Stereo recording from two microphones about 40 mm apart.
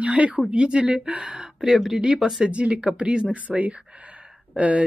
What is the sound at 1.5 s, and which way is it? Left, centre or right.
Speech, centre.